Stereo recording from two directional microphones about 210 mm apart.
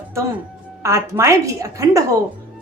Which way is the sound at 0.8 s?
15° right (ahead or behind).